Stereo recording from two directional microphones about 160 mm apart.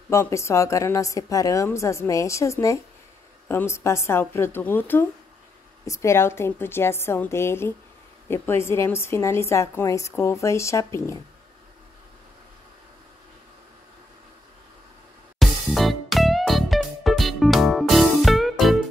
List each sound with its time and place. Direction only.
0.1 s a woman's voice: 15° left (ahead or behind)
15.3 s music: centre (ahead or behind)